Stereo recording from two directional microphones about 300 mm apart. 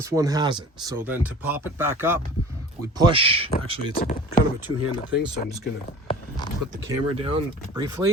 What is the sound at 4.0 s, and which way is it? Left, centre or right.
Speech, left.